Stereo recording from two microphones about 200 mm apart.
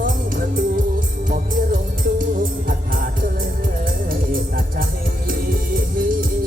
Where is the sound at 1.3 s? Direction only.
45° right (ahead or behind).